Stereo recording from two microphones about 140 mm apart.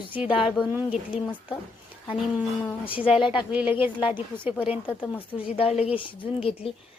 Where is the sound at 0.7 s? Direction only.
10° right (ahead or behind).